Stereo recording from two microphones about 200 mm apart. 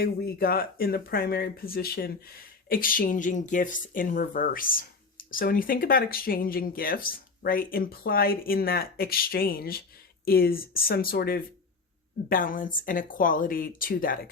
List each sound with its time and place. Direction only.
0.0 s speech: 50° left (ahead or behind)